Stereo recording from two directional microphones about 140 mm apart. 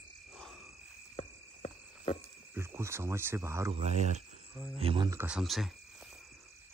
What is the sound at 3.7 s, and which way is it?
Speech, 50° right (ahead or behind).